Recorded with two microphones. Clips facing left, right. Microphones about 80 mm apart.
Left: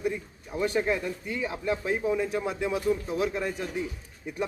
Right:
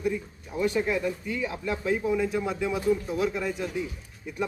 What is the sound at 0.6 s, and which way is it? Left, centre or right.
Speech, left.